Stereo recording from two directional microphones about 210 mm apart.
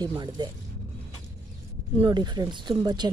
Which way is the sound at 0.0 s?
20° right (ahead or behind).